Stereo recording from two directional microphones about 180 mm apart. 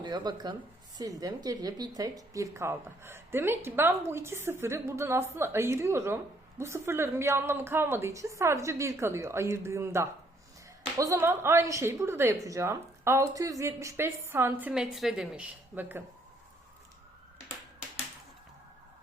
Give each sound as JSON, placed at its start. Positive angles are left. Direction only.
{"t": 0.0, "sound": "speech", "side_deg": -25}
{"t": 14.7, "sound": "a woman's voice", "side_deg": 0}